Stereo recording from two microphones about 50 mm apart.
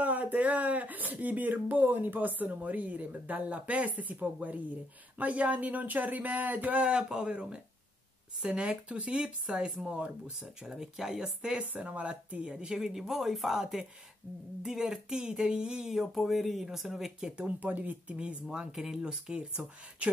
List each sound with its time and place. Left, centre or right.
0.0 s speech: right
6.9 s speech: centre
10.4 s speech: centre
11.7 s speech: right
12.5 s speech: centre
17.5 s speech: right
18.1 s speech: centre
19.0 s speech: centre